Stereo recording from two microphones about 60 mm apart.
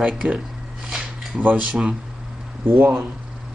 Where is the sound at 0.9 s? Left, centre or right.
Centre.